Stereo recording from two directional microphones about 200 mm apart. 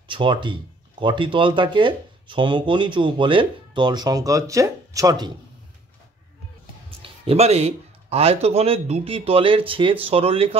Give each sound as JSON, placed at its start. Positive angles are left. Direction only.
{"t": 0.1, "sound": "speech", "side_deg": -25}
{"t": 7.0, "sound": "speech", "side_deg": -30}